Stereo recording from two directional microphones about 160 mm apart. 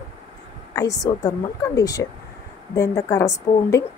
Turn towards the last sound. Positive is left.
turn(degrees=20)  # may be behind; listen again after turning